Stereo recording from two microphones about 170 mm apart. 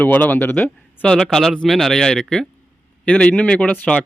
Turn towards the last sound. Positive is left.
turn(degrees=10)  # may be behind; listen again after turning